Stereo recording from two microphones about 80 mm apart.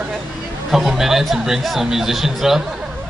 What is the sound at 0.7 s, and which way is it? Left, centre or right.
Speech, centre.